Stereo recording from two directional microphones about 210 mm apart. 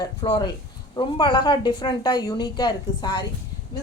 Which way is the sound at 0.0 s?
20° left (ahead or behind).